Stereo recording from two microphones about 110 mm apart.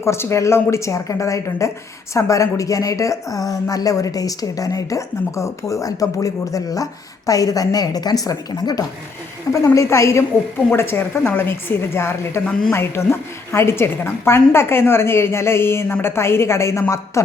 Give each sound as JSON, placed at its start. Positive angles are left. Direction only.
{"t": 0.0, "sound": "a woman's voice", "side_deg": 25}